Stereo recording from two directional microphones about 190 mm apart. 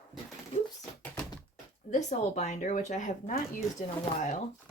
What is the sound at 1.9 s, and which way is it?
Speech, 40° left (ahead or behind).